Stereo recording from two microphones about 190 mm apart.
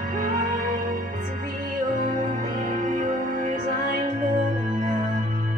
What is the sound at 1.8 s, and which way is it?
Music, 45° right (ahead or behind).